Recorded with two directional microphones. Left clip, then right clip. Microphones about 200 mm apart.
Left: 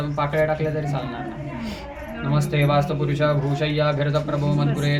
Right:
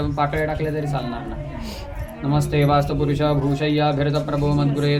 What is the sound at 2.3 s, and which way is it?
Speech, 50° right (ahead or behind).